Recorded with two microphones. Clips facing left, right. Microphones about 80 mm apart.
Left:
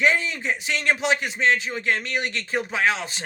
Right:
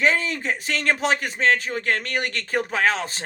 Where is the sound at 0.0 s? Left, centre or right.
Right.